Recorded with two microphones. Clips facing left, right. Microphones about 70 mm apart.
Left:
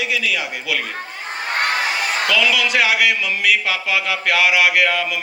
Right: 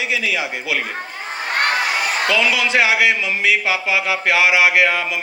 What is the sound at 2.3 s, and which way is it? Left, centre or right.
Speech, right.